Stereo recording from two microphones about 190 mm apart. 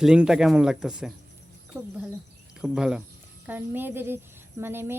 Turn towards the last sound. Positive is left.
turn(degrees=-10)  # may be behind; listen again after turning